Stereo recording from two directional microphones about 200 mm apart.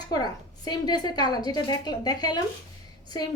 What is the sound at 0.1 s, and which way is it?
A woman's voice, 20° left (ahead or behind).